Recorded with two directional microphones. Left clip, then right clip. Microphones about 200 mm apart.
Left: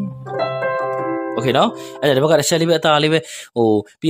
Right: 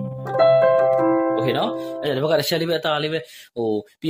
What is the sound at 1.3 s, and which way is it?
Speech, 40° left (ahead or behind).